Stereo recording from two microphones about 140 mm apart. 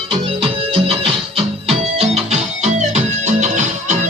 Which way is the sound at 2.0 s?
50° right (ahead or behind).